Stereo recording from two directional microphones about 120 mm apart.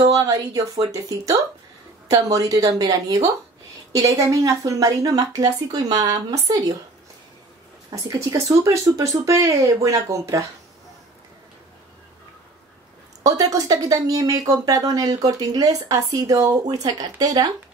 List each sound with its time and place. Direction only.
0.1 s speech: 30° right (ahead or behind)
7.9 s speech: 25° right (ahead or behind)
13.2 s speech: 30° right (ahead or behind)